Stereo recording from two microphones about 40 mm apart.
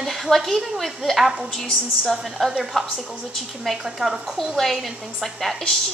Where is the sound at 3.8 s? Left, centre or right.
Centre.